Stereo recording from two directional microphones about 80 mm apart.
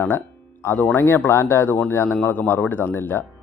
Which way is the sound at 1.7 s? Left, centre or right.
Left.